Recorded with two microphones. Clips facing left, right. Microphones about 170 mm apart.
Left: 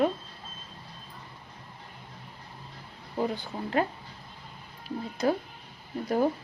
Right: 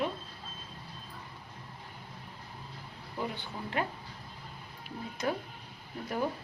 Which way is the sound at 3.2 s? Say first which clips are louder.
Left 7 dB; 35° left (ahead or behind).